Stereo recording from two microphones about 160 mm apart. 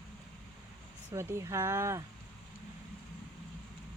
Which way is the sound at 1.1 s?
15° right (ahead or behind).